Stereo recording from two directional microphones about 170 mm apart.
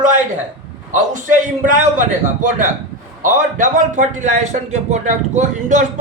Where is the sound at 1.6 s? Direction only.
50° right (ahead or behind).